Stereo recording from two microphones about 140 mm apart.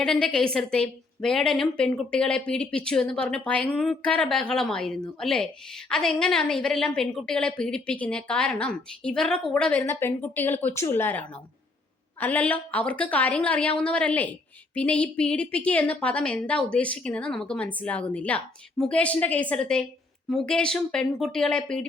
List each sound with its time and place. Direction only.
0.0 s a woman's voice: 5° left (ahead or behind)
9.8 s a woman's voice: 15° left (ahead or behind)